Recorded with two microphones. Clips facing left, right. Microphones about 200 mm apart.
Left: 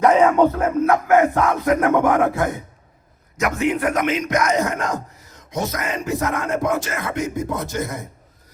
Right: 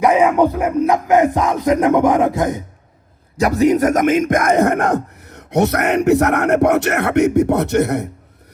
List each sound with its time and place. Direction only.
0.0 s music: 10° right (ahead or behind)
3.3 s speech: 35° right (ahead or behind); by 8.0 s 70° right (ahead or behind)